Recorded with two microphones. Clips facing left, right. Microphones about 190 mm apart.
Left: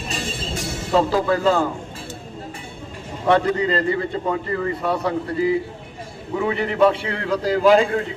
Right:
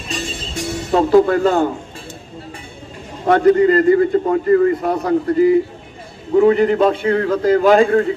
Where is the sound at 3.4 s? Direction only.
50° right (ahead or behind).